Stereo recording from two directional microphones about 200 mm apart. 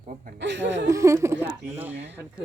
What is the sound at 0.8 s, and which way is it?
Speech, 15° right (ahead or behind).